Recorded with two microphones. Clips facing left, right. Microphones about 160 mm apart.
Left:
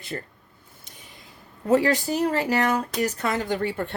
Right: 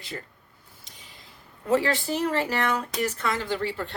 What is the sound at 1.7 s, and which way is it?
Speech, 40° left (ahead or behind).